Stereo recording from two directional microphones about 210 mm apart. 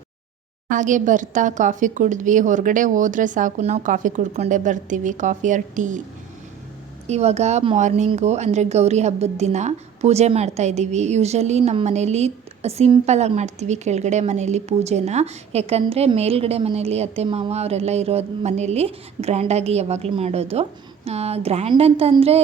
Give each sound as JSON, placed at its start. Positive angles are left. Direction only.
{"t": 0.7, "sound": "speech", "side_deg": -35}
{"t": 7.1, "sound": "speech", "side_deg": -30}